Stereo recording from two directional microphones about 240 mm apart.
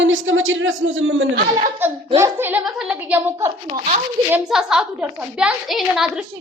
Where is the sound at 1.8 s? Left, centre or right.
Centre.